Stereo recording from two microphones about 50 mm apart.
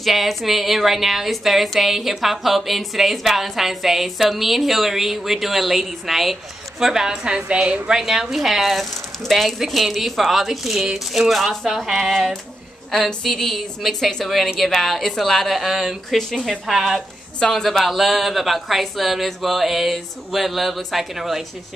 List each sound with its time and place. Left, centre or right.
0.0 s a woman's voice: centre; by 7.9 s right
7.9 s a woman's voice: centre
12.9 s a woman's voice: centre
17.4 s a woman's voice: centre